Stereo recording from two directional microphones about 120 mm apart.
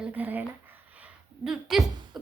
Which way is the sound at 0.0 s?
15° right (ahead or behind).